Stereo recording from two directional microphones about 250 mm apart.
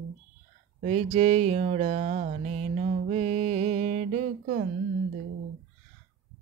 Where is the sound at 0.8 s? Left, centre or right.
Right.